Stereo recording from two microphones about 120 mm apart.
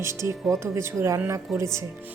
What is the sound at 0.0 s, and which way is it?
Speech, 25° right (ahead or behind).